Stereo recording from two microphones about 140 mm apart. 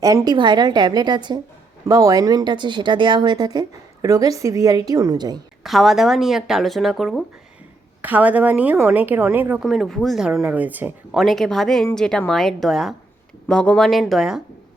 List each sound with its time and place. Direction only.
0.0 s a woman's voice: 25° right (ahead or behind)
5.6 s speech: centre (ahead or behind)
8.0 s a woman's voice: 10° right (ahead or behind)
9.6 s speech: centre (ahead or behind)
10.4 s a woman's voice: 10° right (ahead or behind)
11.2 s speech: centre (ahead or behind)